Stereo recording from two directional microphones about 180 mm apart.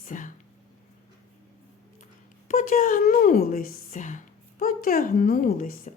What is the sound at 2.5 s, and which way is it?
A woman's voice, 45° left (ahead or behind).